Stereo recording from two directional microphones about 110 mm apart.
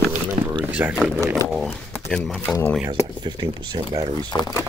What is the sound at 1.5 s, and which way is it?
Speech, centre (ahead or behind).